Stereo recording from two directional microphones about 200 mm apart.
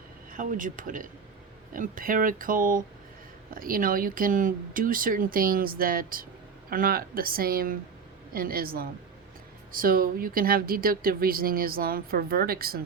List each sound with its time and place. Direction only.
0.3 s speech: 45° right (ahead or behind)